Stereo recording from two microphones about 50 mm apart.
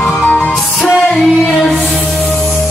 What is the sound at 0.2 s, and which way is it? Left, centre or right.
Music, left.